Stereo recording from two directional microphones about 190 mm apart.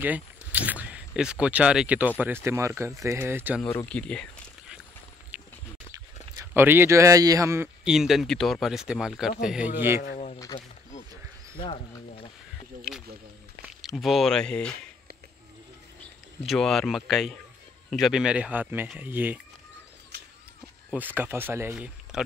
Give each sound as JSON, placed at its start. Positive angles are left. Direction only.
{"t": 0.0, "sound": "speech", "side_deg": -10}
{"t": 3.7, "sound": "speech", "side_deg": 5}
{"t": 5.3, "sound": "a sound", "side_deg": -10}
{"t": 6.4, "sound": "speech", "side_deg": -10}
{"t": 10.0, "sound": "a sound", "side_deg": 40}
{"t": 10.5, "sound": "speech", "side_deg": 20}
{"t": 11.6, "sound": "a sound", "side_deg": 30}
{"t": 13.7, "sound": "speech", "side_deg": 0}
{"t": 16.0, "sound": "speech", "side_deg": 0}
{"t": 20.9, "sound": "speech", "side_deg": -10}